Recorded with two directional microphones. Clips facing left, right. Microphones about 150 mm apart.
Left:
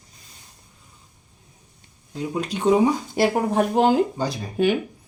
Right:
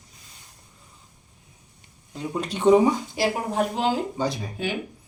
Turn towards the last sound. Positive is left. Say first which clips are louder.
# left 6 dB
turn(degrees=55)  # may be behind; listen again after turning